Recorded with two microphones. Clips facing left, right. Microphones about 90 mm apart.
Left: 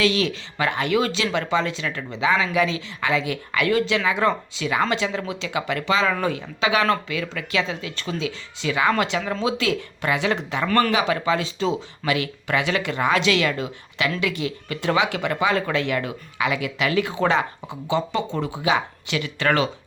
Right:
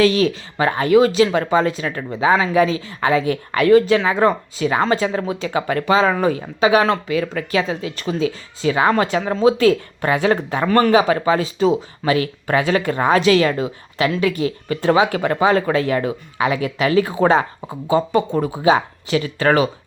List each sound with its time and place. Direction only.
0.0 s speech: 35° right (ahead or behind)
10.7 s speech: 25° right (ahead or behind)
10.9 s speech: 40° right (ahead or behind)